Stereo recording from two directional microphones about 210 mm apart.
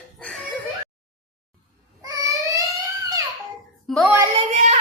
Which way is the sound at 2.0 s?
15° right (ahead or behind).